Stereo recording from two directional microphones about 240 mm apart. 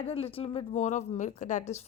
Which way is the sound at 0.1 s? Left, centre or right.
Left.